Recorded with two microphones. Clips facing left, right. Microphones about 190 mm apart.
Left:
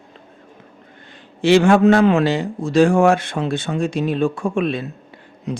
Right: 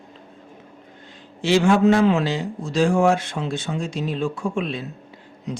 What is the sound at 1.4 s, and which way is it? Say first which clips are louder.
A man's voice: left 4 dB; 60° left (ahead or behind).